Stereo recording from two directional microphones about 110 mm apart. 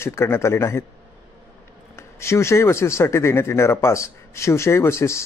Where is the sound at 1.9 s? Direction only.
25° left (ahead or behind).